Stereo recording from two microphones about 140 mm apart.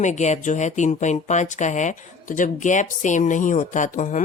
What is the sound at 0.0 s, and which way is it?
Speech, 55° left (ahead or behind).